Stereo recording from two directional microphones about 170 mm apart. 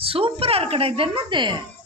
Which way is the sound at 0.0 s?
35° right (ahead or behind).